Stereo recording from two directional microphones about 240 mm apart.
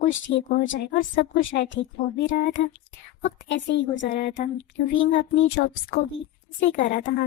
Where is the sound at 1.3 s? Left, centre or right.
Left.